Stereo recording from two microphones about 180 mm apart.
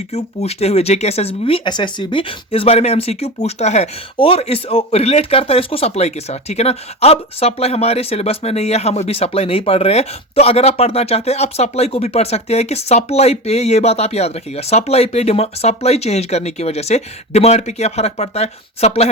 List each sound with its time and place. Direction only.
0.1 s speech: 35° left (ahead or behind)